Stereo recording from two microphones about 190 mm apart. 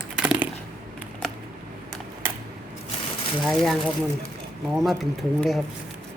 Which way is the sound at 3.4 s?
Centre (ahead or behind).